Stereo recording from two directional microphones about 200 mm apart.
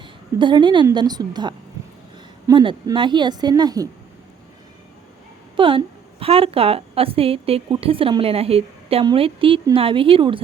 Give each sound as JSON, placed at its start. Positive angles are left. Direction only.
{"t": 0.0, "sound": "a woman's voice", "side_deg": -25}
{"t": 5.5, "sound": "a woman's voice", "side_deg": -25}